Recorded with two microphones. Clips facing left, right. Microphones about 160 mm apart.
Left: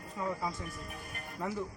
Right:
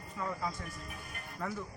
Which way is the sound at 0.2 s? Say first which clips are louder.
Left 2 dB; 20° left (ahead or behind).